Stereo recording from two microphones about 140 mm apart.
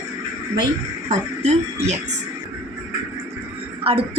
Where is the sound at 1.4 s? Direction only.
50° right (ahead or behind).